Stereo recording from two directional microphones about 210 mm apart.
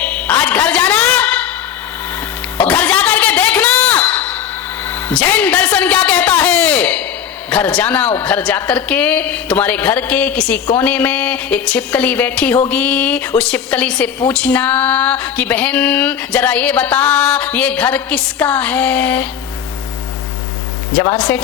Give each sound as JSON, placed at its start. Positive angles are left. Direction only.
{"t": 0.0, "sound": "music", "side_deg": 5}
{"t": 2.6, "sound": "a sound", "side_deg": 5}
{"t": 4.9, "sound": "music", "side_deg": 10}
{"t": 7.5, "sound": "a woman's voice", "side_deg": 5}
{"t": 21.0, "sound": "a woman's voice", "side_deg": 15}